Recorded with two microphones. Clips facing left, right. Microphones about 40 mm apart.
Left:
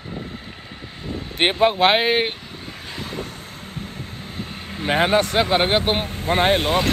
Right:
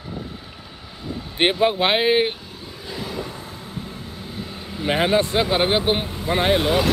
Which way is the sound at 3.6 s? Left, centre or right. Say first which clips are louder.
Even; left.